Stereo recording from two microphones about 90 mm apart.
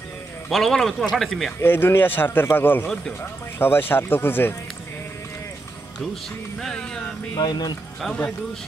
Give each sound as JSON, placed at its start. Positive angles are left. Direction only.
{"t": 0.5, "sound": "a man's voice", "side_deg": 0}
{"t": 1.6, "sound": "speech", "side_deg": 25}
{"t": 6.6, "sound": "speech", "side_deg": 5}
{"t": 7.3, "sound": "speech", "side_deg": 50}